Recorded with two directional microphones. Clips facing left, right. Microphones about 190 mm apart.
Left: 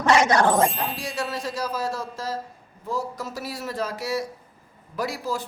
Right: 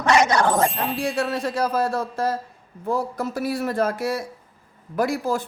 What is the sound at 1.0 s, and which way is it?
Speech, 55° right (ahead or behind).